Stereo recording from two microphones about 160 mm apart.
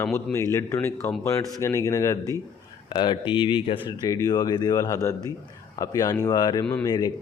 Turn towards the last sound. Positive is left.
turn(degrees=25)  # may be behind; listen again after turning